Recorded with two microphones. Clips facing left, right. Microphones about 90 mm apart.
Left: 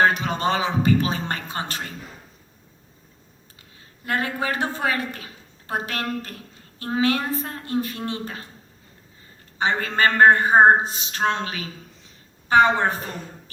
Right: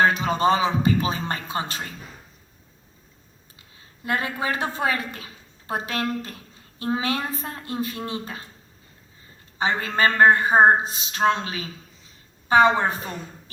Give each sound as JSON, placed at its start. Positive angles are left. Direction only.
{"t": 0.1, "sound": "a man's voice", "side_deg": -25}
{"t": 4.0, "sound": "a woman's voice", "side_deg": -25}
{"t": 9.6, "sound": "a man's voice", "side_deg": -20}